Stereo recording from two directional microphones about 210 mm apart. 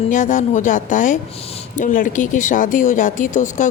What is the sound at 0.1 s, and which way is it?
A woman's voice, 35° left (ahead or behind).